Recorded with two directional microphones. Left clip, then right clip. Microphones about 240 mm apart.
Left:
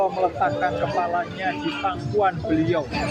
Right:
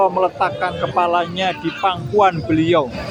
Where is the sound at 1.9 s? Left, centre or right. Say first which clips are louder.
Right 8 dB; right.